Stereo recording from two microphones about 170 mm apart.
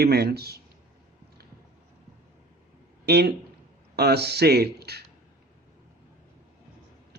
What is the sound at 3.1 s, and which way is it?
Speech, 75° right (ahead or behind).